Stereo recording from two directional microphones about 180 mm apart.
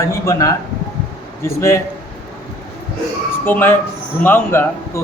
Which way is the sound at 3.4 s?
10° left (ahead or behind).